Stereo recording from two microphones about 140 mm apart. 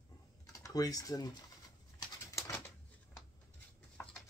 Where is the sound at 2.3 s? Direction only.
20° left (ahead or behind).